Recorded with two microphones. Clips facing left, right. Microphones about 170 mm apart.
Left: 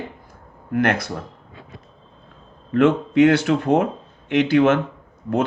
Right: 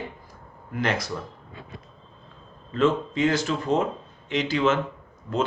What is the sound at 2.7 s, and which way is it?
Speech, 65° left (ahead or behind).